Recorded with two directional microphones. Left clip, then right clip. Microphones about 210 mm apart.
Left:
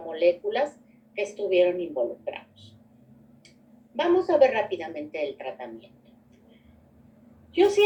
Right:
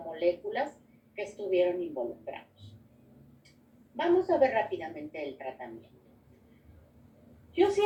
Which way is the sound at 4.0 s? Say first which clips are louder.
Left 5 dB; 45° left (ahead or behind).